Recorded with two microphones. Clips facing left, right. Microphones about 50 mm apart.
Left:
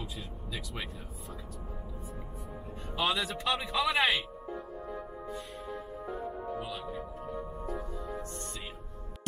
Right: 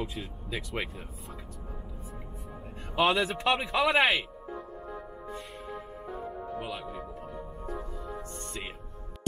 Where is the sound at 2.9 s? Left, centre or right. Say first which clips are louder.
Right 6 dB; right.